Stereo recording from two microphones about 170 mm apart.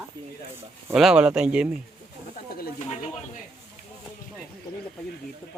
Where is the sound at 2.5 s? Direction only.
60° left (ahead or behind).